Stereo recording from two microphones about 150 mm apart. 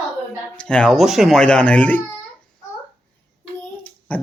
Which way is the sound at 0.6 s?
5° left (ahead or behind).